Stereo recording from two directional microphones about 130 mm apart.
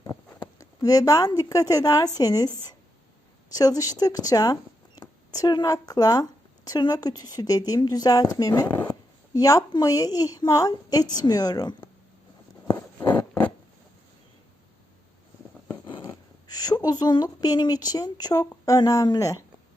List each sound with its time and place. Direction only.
0.6 s a woman's voice: 30° left (ahead or behind)
3.5 s a woman's voice: 25° left (ahead or behind)
12.7 s a sound: 15° left (ahead or behind)
16.0 s a woman's voice: 25° left (ahead or behind)